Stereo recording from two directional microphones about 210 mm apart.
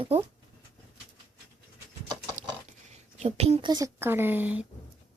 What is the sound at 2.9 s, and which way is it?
Speech, 30° right (ahead or behind).